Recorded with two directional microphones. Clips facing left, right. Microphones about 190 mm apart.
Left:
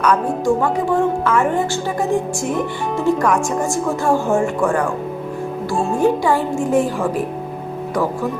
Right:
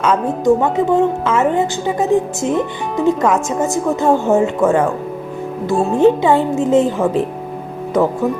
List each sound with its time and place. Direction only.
0.0 s a woman's voice: 25° right (ahead or behind)
6.0 s a woman's voice: 20° right (ahead or behind)